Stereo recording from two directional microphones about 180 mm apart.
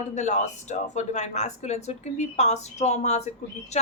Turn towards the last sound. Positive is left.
turn(degrees=40)  # may be behind; listen again after turning